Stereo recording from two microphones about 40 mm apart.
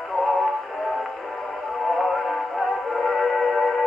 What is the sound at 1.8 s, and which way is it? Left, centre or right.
Music, centre.